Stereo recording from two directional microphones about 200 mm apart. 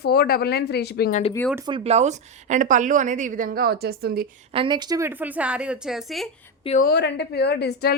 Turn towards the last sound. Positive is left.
turn(degrees=55)  # may be behind; listen again after turning